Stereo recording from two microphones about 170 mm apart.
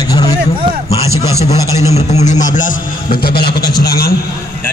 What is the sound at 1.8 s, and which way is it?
A man's voice, 40° left (ahead or behind).